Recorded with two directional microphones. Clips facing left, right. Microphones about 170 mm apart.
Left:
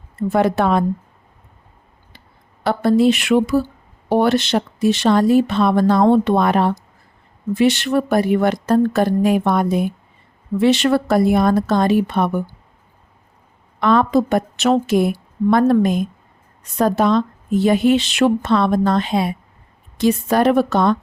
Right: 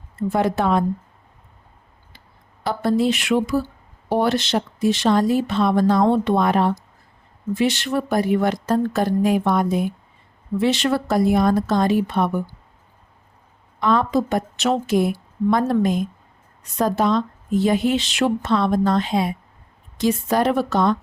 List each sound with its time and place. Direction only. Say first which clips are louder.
0.3 s speech: left 3 dB; 70° left (ahead or behind)
2.6 s speech: left 5 dB; 65° left (ahead or behind)
13.7 s speech: left 4 dB; 70° left (ahead or behind)